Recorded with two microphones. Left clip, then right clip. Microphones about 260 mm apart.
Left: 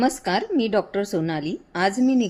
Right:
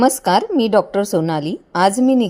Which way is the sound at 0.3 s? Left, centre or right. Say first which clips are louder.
Right 7 dB; right.